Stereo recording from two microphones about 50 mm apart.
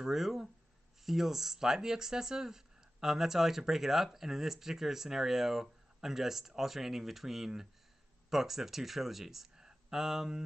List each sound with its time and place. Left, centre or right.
0.0 s speech: centre